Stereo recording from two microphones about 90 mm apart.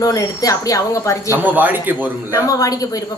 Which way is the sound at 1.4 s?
20° right (ahead or behind).